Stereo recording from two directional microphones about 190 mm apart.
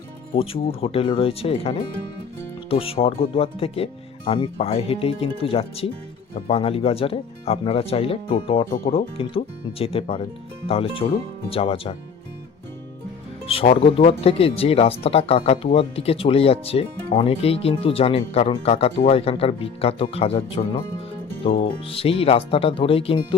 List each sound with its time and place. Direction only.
0.3 s speech: 30° left (ahead or behind)
8.7 s speech: 50° left (ahead or behind)
9.1 s speech: 30° left (ahead or behind)
13.7 s speech: 35° left (ahead or behind)